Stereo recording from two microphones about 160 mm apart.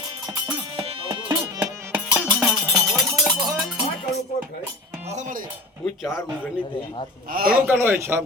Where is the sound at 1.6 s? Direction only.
15° right (ahead or behind).